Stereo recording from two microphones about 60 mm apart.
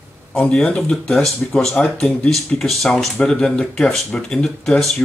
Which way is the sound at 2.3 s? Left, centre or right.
Centre.